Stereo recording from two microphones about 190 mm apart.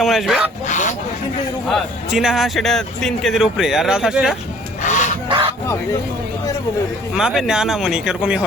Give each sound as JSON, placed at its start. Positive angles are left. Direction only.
{"t": 0.0, "sound": "a man's voice", "side_deg": 0}
{"t": 0.7, "sound": "a sound", "side_deg": 40}
{"t": 1.6, "sound": "a man's voice", "side_deg": -5}
{"t": 4.8, "sound": "fowl", "side_deg": 40}
{"t": 5.3, "sound": "a sound", "side_deg": -30}
{"t": 7.2, "sound": "a man's voice", "side_deg": 0}